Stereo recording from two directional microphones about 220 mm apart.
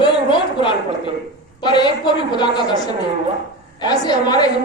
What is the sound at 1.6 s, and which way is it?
A woman's voice, 20° left (ahead or behind).